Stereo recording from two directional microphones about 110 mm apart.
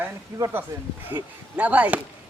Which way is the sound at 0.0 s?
20° right (ahead or behind).